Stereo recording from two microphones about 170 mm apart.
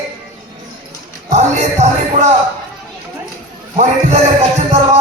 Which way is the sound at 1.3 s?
45° right (ahead or behind).